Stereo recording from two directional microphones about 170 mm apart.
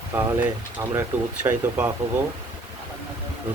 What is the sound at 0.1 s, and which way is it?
Speech, 10° right (ahead or behind).